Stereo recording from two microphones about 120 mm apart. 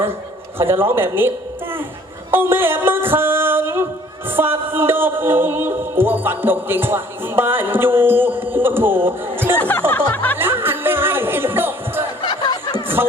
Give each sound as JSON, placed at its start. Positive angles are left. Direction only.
{"t": 0.6, "sound": "speech", "side_deg": -20}
{"t": 2.3, "sound": "music", "side_deg": -20}
{"t": 9.6, "sound": "music", "side_deg": 15}
{"t": 10.3, "sound": "music", "side_deg": -20}
{"t": 12.2, "sound": "a sound", "side_deg": 35}